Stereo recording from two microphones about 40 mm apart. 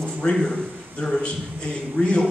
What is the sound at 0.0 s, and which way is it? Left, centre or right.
A man's voice, centre.